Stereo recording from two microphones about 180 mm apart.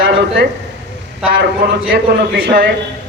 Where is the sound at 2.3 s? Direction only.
60° right (ahead or behind).